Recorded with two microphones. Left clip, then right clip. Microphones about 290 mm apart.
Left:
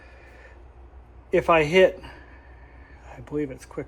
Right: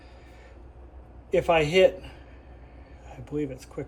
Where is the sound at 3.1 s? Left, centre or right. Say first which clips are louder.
Left 2 dB; centre.